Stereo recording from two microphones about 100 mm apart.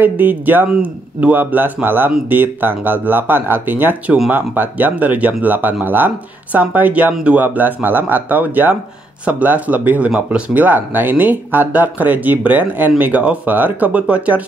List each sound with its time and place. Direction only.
0.0 s speech: 20° right (ahead or behind)